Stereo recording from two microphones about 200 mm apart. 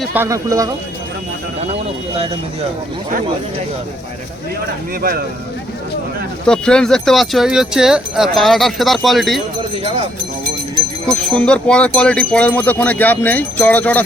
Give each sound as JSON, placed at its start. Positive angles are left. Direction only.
{"t": 0.0, "sound": "speech", "side_deg": -10}
{"t": 6.5, "sound": "speech", "side_deg": 5}
{"t": 11.0, "sound": "speech", "side_deg": 5}